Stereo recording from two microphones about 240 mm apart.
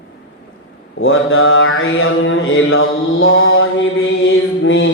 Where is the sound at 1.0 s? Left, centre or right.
Left.